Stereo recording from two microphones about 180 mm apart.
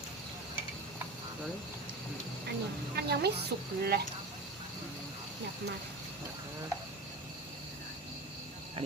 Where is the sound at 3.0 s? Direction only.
65° right (ahead or behind).